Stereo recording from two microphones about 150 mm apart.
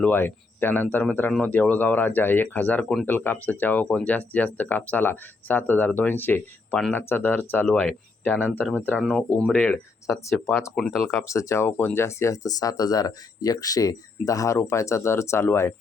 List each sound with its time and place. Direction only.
0.0 s speech: 15° left (ahead or behind)
11.1 s speech: 20° left (ahead or behind)